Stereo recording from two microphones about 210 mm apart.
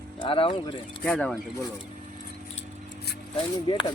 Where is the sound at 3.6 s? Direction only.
20° left (ahead or behind).